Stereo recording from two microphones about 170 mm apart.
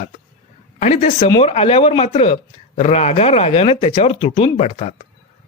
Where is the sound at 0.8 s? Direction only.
45° left (ahead or behind).